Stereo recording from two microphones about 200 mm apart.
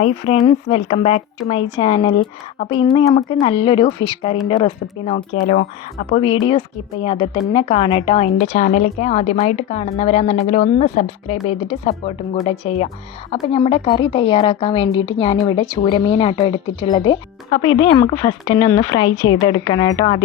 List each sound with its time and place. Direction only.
0.0 s a woman's voice: 30° left (ahead or behind)
6.1 s a woman's voice: 25° left (ahead or behind)